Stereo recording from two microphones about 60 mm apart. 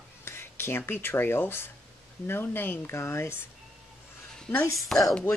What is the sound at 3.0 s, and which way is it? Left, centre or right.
Speech, left.